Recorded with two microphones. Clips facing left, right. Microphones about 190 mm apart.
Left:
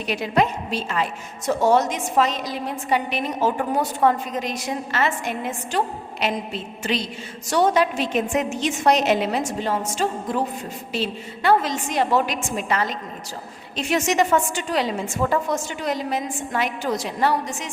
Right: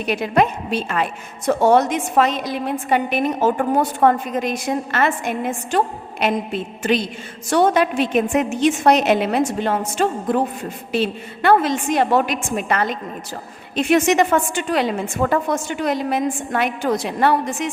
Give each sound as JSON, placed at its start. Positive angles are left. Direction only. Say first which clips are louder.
{"t": 0.0, "sound": "a woman's voice", "louder": "right 3 dB", "side_deg": -55}